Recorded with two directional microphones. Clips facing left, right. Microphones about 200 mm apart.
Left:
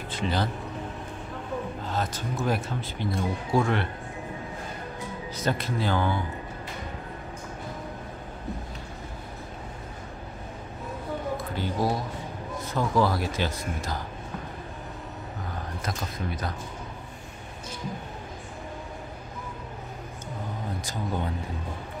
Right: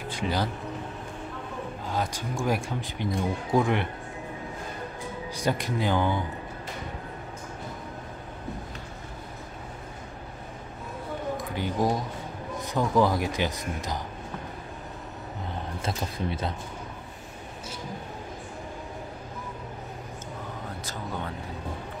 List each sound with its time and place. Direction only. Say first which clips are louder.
0.1 s speech: even; 10° right (ahead or behind)
1.9 s speech: right 2 dB; 10° right (ahead or behind)
5.3 s speech: right 1 dB; 15° right (ahead or behind)
11.3 s speech: right 3 dB; 15° right (ahead or behind)
15.8 s speech: right 3 dB; 30° right (ahead or behind)